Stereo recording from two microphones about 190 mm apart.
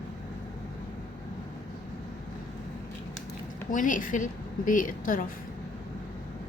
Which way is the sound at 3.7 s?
45° left (ahead or behind).